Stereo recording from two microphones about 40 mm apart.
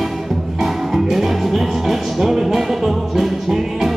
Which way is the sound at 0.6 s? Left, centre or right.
Centre.